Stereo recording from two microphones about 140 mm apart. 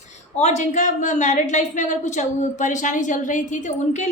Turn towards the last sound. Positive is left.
turn(degrees=60)  # may be behind; listen again after turning